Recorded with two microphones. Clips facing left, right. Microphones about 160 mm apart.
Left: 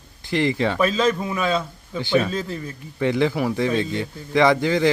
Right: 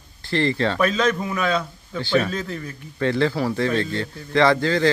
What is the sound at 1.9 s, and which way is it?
Speech, 15° left (ahead or behind).